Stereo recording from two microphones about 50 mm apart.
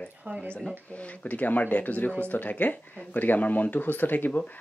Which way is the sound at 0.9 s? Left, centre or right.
Left.